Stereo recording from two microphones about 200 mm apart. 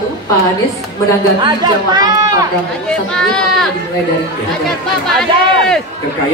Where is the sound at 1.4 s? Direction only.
20° right (ahead or behind).